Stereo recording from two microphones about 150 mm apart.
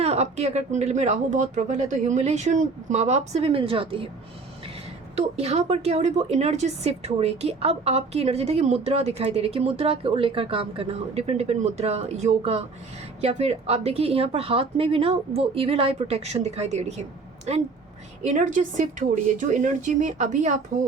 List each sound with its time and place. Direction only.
0.0 s a woman's voice: 45° right (ahead or behind)
5.1 s a woman's voice: 45° right (ahead or behind)